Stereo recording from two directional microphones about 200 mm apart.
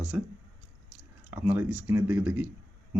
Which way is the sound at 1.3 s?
10° right (ahead or behind).